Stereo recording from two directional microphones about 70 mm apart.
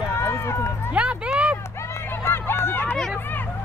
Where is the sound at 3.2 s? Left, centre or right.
Left.